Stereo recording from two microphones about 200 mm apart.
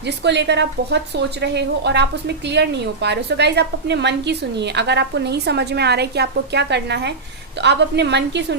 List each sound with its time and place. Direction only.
0.0 s a woman's voice: 60° right (ahead or behind)